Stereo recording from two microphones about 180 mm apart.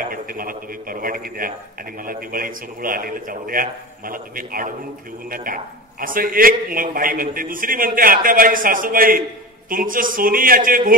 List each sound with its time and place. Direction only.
0.1 s a man's voice: 50° right (ahead or behind)